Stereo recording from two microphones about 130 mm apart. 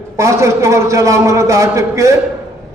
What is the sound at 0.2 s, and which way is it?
A man's voice, 20° right (ahead or behind).